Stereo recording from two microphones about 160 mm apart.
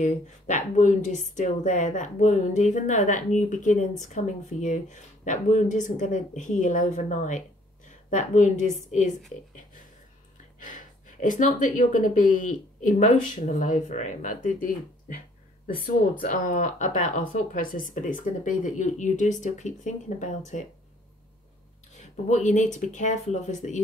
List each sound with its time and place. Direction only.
0.0 s speech: 50° left (ahead or behind)
10.6 s speech: 55° left (ahead or behind)
21.9 s speech: 50° left (ahead or behind)